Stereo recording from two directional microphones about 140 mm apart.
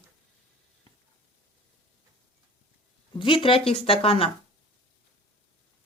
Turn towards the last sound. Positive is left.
turn(degrees=45)  # may be behind; listen again after turning